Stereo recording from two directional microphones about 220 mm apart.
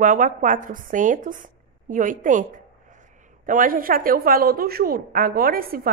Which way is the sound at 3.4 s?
40° right (ahead or behind).